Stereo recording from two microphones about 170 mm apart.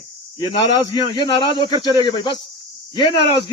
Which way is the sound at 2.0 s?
25° left (ahead or behind).